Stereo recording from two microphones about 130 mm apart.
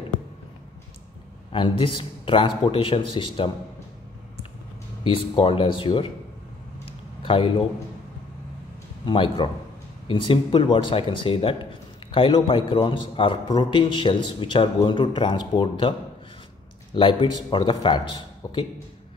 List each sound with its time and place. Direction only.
1.5 s a man's voice: 40° left (ahead or behind)
5.0 s a man's voice: 45° left (ahead or behind)
7.2 s a man's voice: 40° left (ahead or behind)
9.0 s a man's voice: 40° left (ahead or behind)
16.9 s a man's voice: 40° left (ahead or behind)